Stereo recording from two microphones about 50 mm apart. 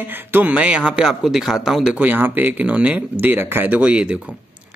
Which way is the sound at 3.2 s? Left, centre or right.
Right.